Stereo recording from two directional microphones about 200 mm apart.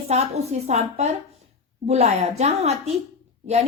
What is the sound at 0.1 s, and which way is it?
A woman's voice, 35° right (ahead or behind).